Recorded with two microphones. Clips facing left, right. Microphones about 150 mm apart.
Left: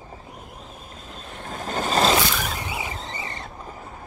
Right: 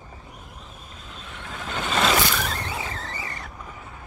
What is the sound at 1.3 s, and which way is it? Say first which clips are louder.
Vehicle: left 4 dB; 40° left (ahead or behind).